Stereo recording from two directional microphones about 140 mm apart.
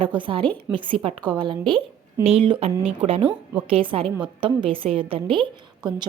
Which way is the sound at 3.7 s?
40° right (ahead or behind).